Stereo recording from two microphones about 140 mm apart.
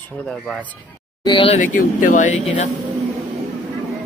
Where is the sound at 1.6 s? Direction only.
70° left (ahead or behind).